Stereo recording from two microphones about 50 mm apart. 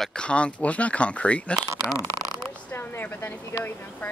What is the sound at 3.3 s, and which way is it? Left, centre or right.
Speech, left.